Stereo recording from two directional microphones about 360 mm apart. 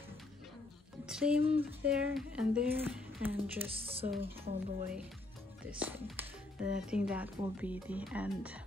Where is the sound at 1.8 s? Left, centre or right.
Centre.